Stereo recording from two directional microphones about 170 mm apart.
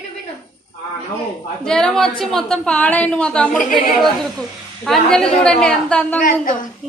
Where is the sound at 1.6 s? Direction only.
5° left (ahead or behind).